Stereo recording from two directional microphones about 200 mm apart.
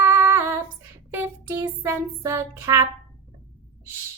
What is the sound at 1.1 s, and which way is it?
Child singing, 15° right (ahead or behind).